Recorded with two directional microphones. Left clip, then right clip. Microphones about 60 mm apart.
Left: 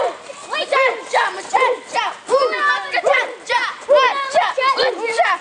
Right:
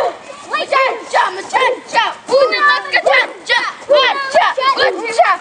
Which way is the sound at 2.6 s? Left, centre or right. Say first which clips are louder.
Right 4 dB; centre.